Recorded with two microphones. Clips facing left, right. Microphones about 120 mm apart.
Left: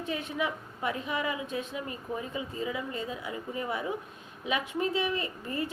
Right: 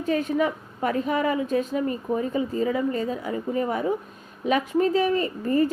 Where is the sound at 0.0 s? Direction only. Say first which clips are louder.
Right 9 dB; 40° right (ahead or behind).